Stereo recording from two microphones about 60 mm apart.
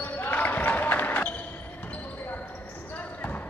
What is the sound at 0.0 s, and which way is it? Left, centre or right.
Basketball bounce, left.